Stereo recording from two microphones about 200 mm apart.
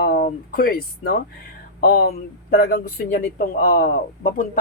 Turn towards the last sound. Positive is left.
turn(degrees=50)  # may be behind; listen again after turning